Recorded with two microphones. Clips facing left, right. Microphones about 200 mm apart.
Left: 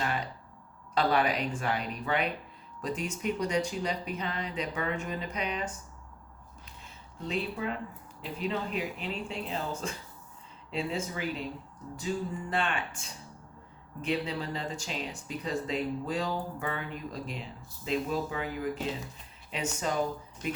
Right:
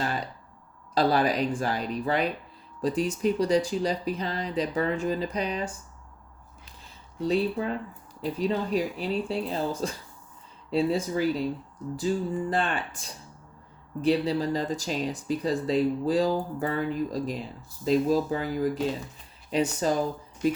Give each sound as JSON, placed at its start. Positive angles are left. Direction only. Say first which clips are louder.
{"t": 0.9, "sound": "speech", "louder": "right 4 dB", "side_deg": -35}
{"t": 6.7, "sound": "a sound", "louder": "even", "side_deg": -35}
{"t": 8.2, "sound": "speech", "louder": "right 6 dB", "side_deg": -35}